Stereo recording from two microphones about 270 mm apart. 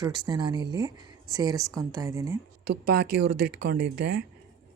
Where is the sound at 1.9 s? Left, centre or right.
Centre.